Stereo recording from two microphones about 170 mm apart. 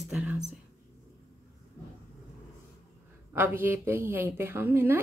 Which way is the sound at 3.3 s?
15° right (ahead or behind).